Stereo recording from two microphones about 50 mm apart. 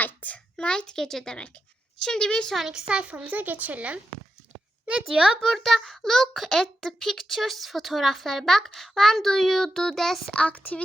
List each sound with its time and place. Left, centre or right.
0.0 s a sound: left
0.5 s speech: centre
2.6 s speech: centre
3.1 s speech: right
5.0 s speech: centre
5.4 s a child's voice: centre
10.3 s speech: left